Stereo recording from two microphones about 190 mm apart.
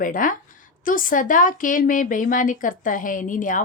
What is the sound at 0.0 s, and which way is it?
A woman's voice, 45° left (ahead or behind).